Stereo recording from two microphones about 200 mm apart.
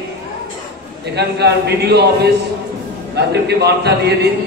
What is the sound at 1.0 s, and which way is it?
A man's voice, 55° right (ahead or behind).